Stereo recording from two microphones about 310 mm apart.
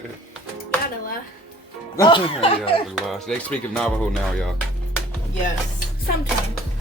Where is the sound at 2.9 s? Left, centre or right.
Centre.